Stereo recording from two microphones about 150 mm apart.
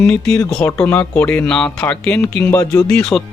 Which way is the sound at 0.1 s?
5° left (ahead or behind).